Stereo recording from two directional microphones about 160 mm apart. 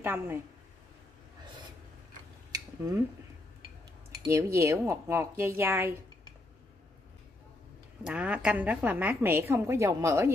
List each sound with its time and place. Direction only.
0.0 s a woman's voice: 15° right (ahead or behind)
2.5 s a sound: 20° right (ahead or behind)
4.3 s a woman's voice: 20° right (ahead or behind)
8.0 s a woman's voice: 5° right (ahead or behind)